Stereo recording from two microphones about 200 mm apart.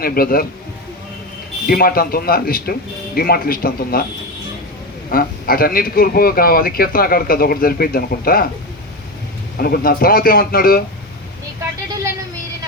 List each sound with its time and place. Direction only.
0.0 s speech: 50° left (ahead or behind)
1.6 s speech: 50° left (ahead or behind)
5.1 s speech: 45° left (ahead or behind)
9.6 s speech: 50° left (ahead or behind)